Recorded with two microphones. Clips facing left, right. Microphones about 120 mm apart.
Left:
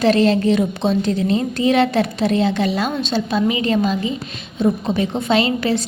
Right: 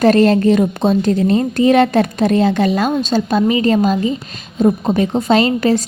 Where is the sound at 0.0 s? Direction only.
45° right (ahead or behind).